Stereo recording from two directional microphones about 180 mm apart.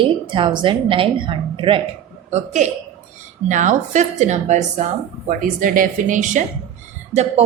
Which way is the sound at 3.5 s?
45° right (ahead or behind).